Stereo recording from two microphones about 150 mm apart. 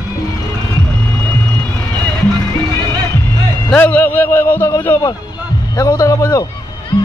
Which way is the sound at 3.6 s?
10° left (ahead or behind).